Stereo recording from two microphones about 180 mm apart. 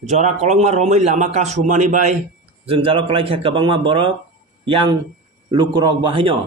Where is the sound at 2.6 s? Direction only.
30° right (ahead or behind).